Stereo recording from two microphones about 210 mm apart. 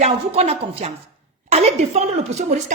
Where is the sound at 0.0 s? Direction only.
30° right (ahead or behind).